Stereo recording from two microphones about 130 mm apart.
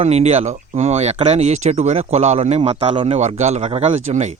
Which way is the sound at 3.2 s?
60° right (ahead or behind).